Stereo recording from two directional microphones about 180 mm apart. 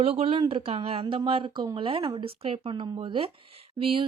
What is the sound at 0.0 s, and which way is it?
Speech, 35° right (ahead or behind).